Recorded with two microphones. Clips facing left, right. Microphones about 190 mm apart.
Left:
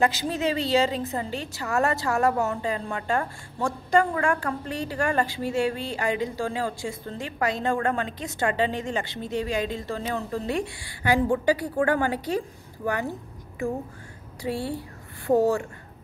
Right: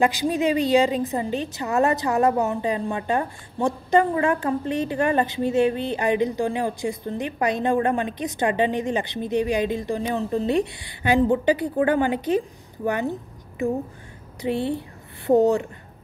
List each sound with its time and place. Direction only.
0.0 s a woman's voice: 15° right (ahead or behind)
14.4 s a woman's voice: 20° right (ahead or behind)